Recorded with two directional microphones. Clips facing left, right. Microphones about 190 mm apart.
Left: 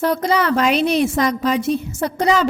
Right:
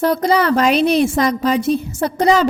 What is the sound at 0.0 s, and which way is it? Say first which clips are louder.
A woman's voice: right 3 dB; 35° right (ahead or behind).